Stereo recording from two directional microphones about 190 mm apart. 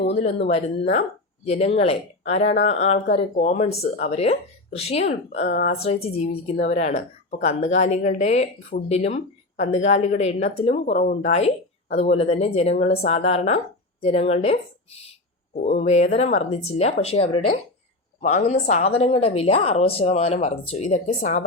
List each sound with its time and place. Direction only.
0.1 s speech: 35° left (ahead or behind)
15.6 s speech: 35° left (ahead or behind)